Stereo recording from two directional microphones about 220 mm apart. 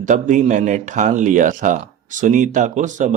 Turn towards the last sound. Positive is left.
turn(degrees=-35)  # may be behind; listen again after turning